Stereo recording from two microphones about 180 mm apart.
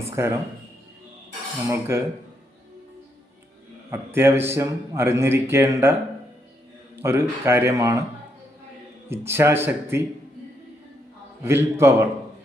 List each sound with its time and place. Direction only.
0.0 s music: 15° right (ahead or behind)
1.7 s a man's voice: 15° right (ahead or behind)
3.9 s a man's voice: 15° right (ahead or behind)
6.9 s a man's voice: 15° right (ahead or behind)
9.0 s a man's voice: 15° right (ahead or behind)
11.4 s a man's voice: 15° right (ahead or behind)